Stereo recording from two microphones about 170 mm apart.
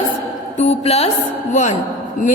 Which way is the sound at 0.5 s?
40° left (ahead or behind).